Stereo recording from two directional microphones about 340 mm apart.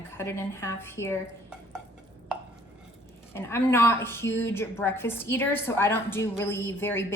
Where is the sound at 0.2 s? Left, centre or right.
Centre.